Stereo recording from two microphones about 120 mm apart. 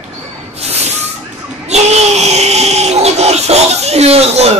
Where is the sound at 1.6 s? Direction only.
65° right (ahead or behind).